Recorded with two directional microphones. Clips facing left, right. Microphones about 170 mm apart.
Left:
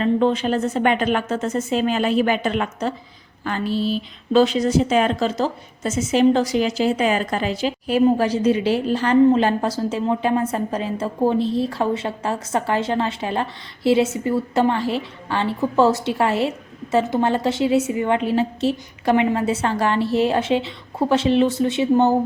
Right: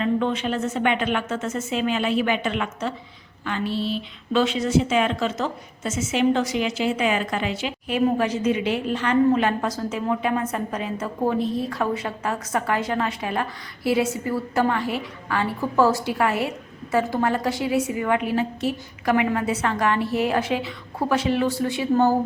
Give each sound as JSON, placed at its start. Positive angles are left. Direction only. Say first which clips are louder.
{"t": 0.0, "sound": "a woman's voice", "louder": "left 4 dB", "side_deg": 35}